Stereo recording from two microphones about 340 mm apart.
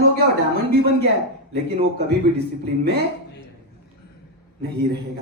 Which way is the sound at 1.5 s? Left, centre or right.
Centre.